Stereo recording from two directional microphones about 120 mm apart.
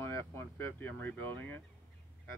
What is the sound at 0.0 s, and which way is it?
Speech, 20° left (ahead or behind).